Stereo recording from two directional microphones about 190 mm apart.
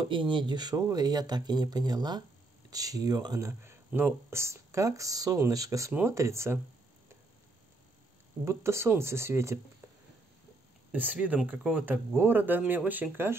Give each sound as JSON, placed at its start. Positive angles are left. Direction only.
{"t": 0.0, "sound": "speech", "side_deg": -25}
{"t": 8.5, "sound": "speech", "side_deg": -15}
{"t": 10.9, "sound": "speech", "side_deg": -10}